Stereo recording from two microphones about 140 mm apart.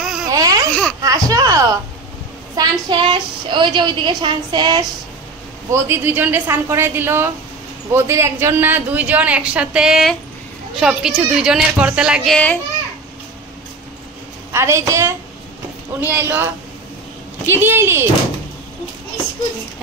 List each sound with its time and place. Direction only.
0.0 s laughter: 5° right (ahead or behind)
0.3 s laughter: 25° right (ahead or behind)
0.7 s laughter: 10° left (ahead or behind)
1.0 s a sound: 25° right (ahead or behind)
2.5 s a woman's voice: 35° right (ahead or behind)
5.7 s speech: 15° right (ahead or behind)
14.5 s a woman's voice: 20° right (ahead or behind)
17.6 s speech: 15° right (ahead or behind)